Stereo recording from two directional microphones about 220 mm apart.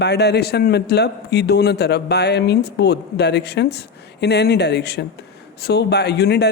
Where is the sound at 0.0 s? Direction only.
50° left (ahead or behind).